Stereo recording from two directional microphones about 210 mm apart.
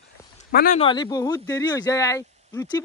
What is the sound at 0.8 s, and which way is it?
Speech, 20° left (ahead or behind).